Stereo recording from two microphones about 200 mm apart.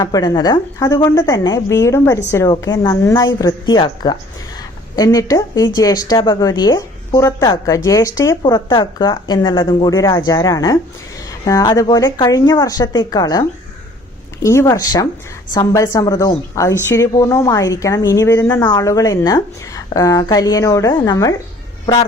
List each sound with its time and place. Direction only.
0.0 s a woman's voice: 20° left (ahead or behind)
14.4 s a woman's voice: 15° left (ahead or behind)